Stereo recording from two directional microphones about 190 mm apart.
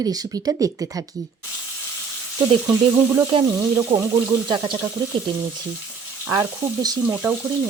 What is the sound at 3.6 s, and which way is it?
Speech, 10° right (ahead or behind).